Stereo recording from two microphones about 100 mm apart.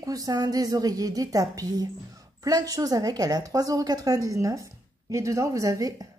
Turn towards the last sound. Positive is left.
turn(degrees=-35)  # may be behind; listen again after turning